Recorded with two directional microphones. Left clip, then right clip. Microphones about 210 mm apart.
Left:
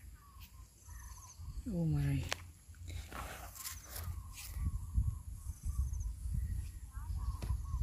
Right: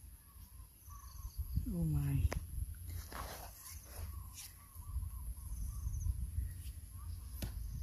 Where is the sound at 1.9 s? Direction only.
10° left (ahead or behind).